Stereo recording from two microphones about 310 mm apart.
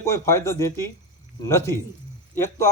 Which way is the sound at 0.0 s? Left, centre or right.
Centre.